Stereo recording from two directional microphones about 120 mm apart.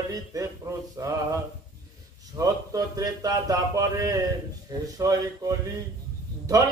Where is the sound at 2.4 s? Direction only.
30° right (ahead or behind).